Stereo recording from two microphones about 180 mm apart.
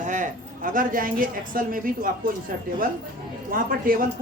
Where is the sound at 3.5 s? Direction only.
50° right (ahead or behind).